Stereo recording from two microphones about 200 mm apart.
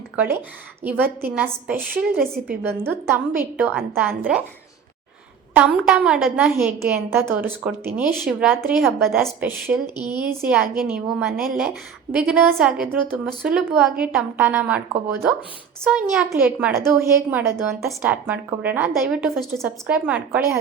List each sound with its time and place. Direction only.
0.2 s a woman's voice: 10° right (ahead or behind)
5.5 s a woman's voice: 5° right (ahead or behind)
9.8 s speech: 20° left (ahead or behind)
10.4 s a woman's voice: 5° right (ahead or behind)
15.8 s a woman's voice: 5° right (ahead or behind)